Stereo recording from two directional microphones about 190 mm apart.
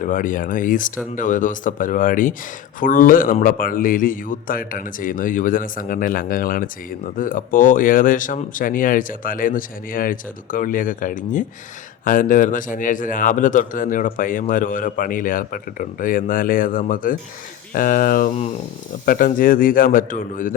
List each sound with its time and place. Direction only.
0.0 s a man's voice: 45° left (ahead or behind)
18.3 s speech: 35° left (ahead or behind)
19.0 s a man's voice: 45° left (ahead or behind)